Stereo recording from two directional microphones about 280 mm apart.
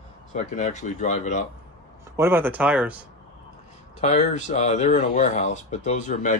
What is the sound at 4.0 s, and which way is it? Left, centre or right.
Speech, left.